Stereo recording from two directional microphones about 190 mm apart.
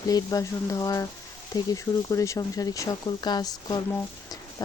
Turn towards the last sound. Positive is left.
turn(degrees=20)  # may be behind; listen again after turning